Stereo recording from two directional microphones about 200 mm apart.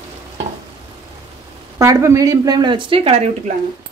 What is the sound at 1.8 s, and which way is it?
Speech, 15° right (ahead or behind).